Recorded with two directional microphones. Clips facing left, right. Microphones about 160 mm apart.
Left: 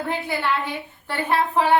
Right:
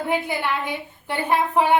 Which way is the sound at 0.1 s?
15° right (ahead or behind).